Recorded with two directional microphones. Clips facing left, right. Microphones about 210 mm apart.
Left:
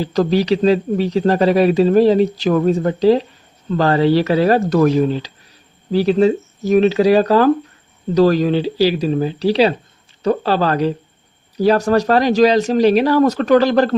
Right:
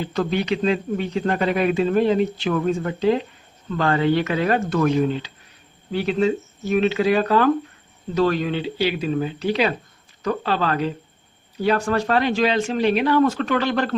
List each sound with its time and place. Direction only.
0.0 s a man's voice: 35° left (ahead or behind)